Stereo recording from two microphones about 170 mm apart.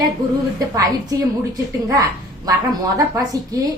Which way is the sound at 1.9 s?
20° right (ahead or behind).